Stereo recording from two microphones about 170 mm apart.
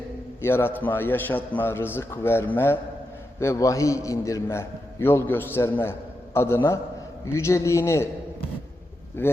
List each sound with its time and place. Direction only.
0.4 s a man's voice: 15° left (ahead or behind)
9.2 s a man's voice: 15° left (ahead or behind)